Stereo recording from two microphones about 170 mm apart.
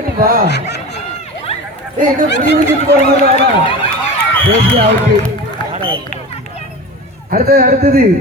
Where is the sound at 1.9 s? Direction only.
55° right (ahead or behind).